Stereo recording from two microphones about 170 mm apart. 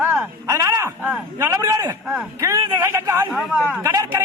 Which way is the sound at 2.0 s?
5° right (ahead or behind).